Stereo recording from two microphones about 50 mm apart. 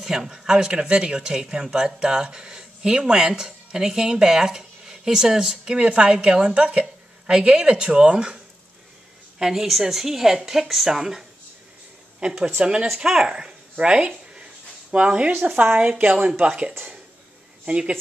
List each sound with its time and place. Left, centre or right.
0.0 s speech: centre
5.8 s a woman's voice: right
9.4 s a woman's voice: centre
12.8 s a woman's voice: centre; by 17.9 s right